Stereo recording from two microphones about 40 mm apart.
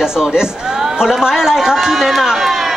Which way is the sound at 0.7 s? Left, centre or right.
Centre.